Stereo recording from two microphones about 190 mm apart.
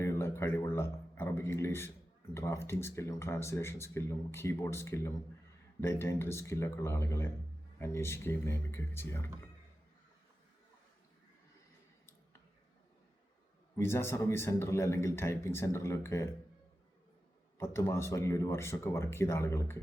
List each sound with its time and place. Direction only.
0.0 s a sound: 15° left (ahead or behind)
2.3 s speech: 15° left (ahead or behind)
13.7 s speech: 15° left (ahead or behind)
17.6 s speech: 15° left (ahead or behind)